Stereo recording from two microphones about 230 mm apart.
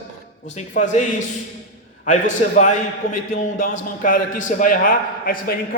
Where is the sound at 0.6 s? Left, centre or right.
Left.